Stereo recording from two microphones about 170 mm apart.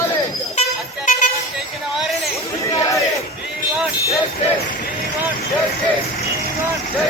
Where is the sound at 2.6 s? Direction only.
20° left (ahead or behind).